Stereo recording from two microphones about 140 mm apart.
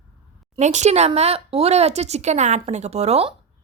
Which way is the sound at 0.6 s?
55° right (ahead or behind).